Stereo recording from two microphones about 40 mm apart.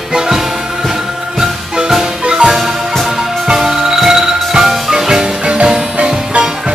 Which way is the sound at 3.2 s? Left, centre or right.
Centre.